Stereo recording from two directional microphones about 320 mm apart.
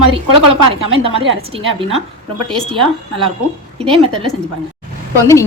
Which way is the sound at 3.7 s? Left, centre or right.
Centre.